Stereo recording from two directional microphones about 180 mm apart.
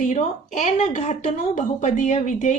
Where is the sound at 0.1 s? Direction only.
40° left (ahead or behind).